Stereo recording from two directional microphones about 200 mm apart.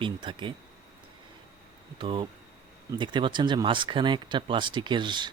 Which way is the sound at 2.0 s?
25° right (ahead or behind).